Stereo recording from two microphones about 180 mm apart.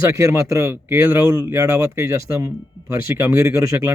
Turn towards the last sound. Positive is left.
turn(degrees=-20)  # may be behind; listen again after turning